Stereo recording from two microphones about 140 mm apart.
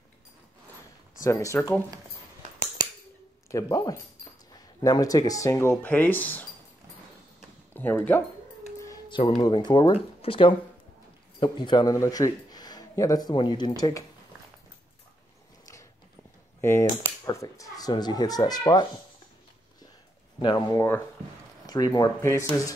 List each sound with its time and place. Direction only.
1.2 s speech: 25° left (ahead or behind)
3.5 s speech: 25° left (ahead or behind)
7.7 s speech: 15° left (ahead or behind)
8.7 s a sound: 20° left (ahead or behind)
9.4 s a man's voice: 30° left (ahead or behind)
16.9 s speech: 25° left (ahead or behind)
20.3 s speech: 35° left (ahead or behind)